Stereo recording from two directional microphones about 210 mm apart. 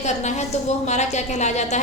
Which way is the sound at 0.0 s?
35° left (ahead or behind).